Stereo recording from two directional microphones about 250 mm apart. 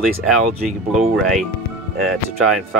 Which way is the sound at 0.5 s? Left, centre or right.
Right.